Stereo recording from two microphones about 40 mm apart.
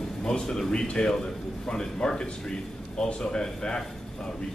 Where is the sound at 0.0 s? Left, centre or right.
Centre.